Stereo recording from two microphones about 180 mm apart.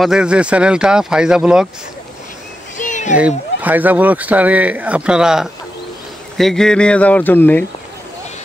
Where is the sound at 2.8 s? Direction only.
45° left (ahead or behind).